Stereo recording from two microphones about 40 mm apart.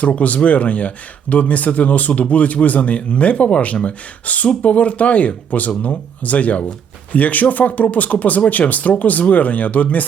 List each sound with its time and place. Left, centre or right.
0.2 s speech: left